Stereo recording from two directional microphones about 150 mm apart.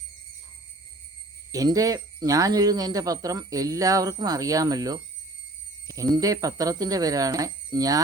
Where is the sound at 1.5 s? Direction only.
25° right (ahead or behind).